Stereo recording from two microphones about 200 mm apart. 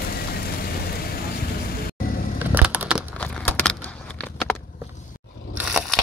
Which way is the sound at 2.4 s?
10° right (ahead or behind).